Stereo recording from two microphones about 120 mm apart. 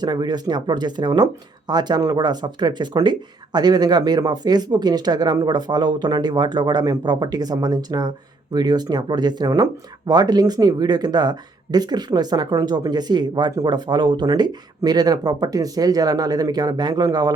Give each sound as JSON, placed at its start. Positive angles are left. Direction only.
{"t": 0.0, "sound": "speech", "side_deg": -35}